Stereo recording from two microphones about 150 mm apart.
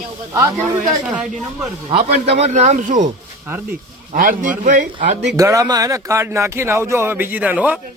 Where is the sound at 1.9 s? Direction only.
45° right (ahead or behind).